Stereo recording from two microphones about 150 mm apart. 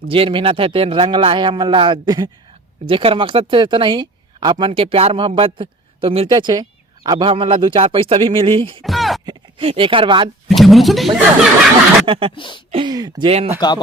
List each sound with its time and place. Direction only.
0.1 s speech: 35° right (ahead or behind)
8.8 s a sound: centre (ahead or behind)
9.2 s speech: 35° right (ahead or behind)
10.5 s speech: centre (ahead or behind)
12.0 s speech: 35° right (ahead or behind)
12.4 s speech: 35° left (ahead or behind)
12.7 s speech: 30° right (ahead or behind)
13.6 s speech: 30° left (ahead or behind)